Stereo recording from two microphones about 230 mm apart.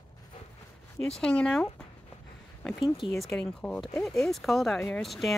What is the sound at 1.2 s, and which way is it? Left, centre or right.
Speech, centre.